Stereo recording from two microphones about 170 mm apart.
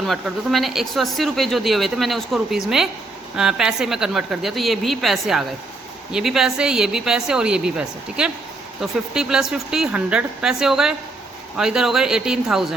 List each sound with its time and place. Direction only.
0.1 s speech: centre (ahead or behind)